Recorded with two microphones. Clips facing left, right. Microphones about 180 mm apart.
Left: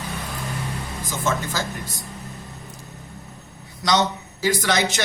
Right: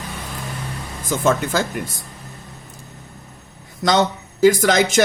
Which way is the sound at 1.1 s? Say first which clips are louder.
Right 7 dB; 55° right (ahead or behind).